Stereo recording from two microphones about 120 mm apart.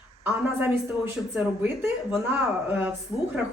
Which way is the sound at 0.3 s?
15° right (ahead or behind).